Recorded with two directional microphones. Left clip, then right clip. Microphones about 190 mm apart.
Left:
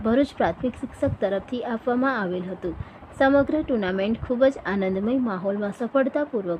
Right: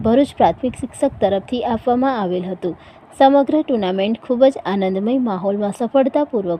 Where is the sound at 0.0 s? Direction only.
15° right (ahead or behind).